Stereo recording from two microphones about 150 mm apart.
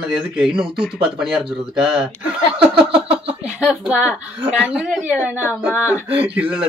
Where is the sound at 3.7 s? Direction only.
10° right (ahead or behind).